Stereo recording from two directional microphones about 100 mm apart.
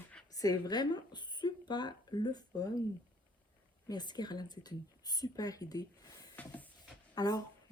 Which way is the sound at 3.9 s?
45° left (ahead or behind).